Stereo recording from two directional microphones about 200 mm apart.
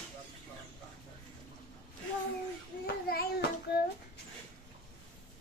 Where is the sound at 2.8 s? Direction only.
50° left (ahead or behind).